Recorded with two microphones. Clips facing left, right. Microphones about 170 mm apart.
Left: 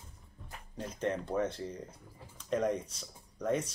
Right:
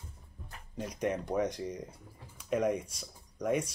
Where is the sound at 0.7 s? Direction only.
10° right (ahead or behind).